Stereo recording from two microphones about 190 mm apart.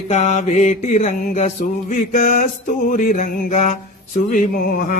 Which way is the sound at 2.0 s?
50° left (ahead or behind).